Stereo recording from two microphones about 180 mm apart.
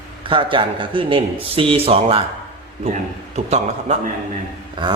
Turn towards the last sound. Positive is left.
turn(degrees=-25)  # may be behind; listen again after turning